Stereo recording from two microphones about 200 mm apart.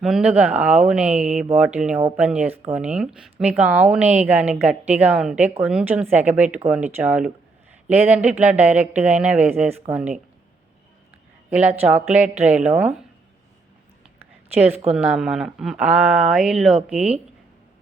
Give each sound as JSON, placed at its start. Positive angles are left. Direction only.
{"t": 0.0, "sound": "a woman's voice", "side_deg": -5}
{"t": 11.8, "sound": "a woman's voice", "side_deg": -10}
{"t": 14.5, "sound": "a woman's voice", "side_deg": -10}